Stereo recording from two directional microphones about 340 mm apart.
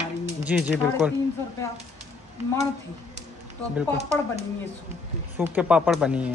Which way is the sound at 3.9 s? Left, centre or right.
Centre.